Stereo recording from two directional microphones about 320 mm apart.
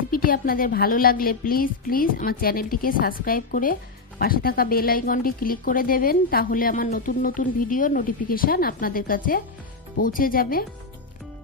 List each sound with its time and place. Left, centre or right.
0.1 s speech: left